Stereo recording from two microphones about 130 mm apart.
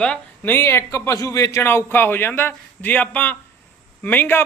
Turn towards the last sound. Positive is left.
turn(degrees=15)  # may be behind; listen again after turning